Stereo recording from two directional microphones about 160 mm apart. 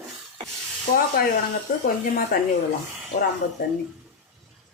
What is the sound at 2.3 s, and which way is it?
Speech, 65° left (ahead or behind).